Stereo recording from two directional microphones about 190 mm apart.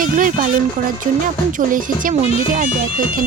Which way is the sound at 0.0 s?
45° right (ahead or behind).